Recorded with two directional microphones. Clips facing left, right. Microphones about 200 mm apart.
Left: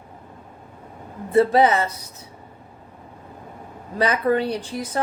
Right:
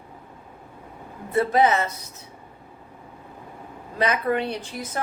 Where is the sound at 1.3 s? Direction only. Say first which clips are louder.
Left 4 dB; 30° left (ahead or behind).